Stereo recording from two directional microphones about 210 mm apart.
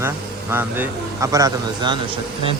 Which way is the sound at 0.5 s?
10° right (ahead or behind).